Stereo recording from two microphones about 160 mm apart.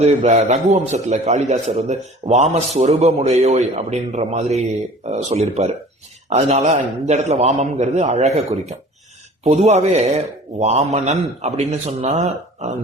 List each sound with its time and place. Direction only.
0.0 s speech: 45° right (ahead or behind)